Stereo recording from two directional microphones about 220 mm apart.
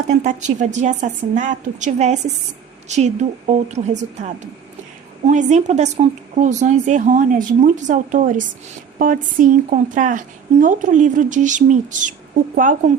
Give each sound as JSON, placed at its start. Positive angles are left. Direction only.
{"t": 0.1, "sound": "speech", "side_deg": -35}
{"t": 5.3, "sound": "speech", "side_deg": -30}